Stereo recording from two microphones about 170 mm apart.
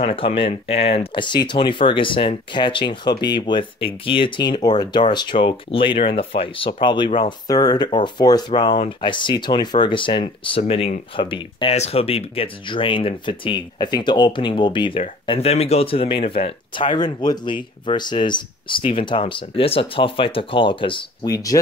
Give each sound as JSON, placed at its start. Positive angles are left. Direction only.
{"t": 0.0, "sound": "speech", "side_deg": 35}